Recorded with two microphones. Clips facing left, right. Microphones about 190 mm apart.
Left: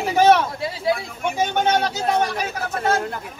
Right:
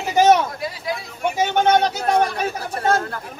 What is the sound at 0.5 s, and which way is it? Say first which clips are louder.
Speech: left 4 dB; 25° left (ahead or behind).